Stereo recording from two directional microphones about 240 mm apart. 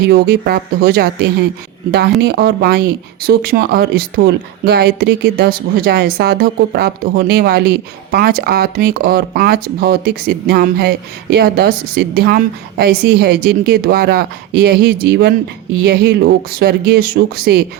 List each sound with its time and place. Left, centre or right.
0.0 s speech: right